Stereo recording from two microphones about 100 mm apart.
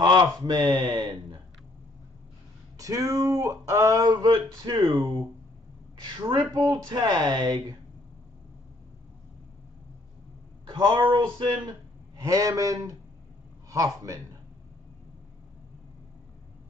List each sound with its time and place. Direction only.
0.0 s speech: 50° right (ahead or behind)
2.8 s speech: 35° right (ahead or behind)
10.7 s speech: 45° right (ahead or behind)
12.2 s speech: 35° right (ahead or behind)